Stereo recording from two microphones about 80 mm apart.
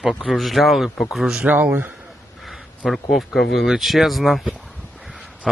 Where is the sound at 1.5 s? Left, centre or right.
Right.